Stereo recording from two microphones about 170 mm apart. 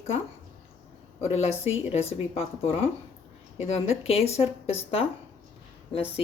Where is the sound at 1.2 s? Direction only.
35° left (ahead or behind).